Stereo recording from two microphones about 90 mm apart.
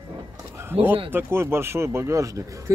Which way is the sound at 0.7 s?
25° right (ahead or behind).